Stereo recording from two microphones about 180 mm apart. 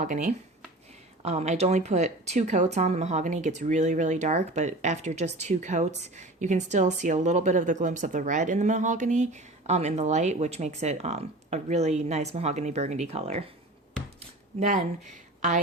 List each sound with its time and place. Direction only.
0.0 s speech: 45° right (ahead or behind)
14.6 s a woman's voice: 40° right (ahead or behind)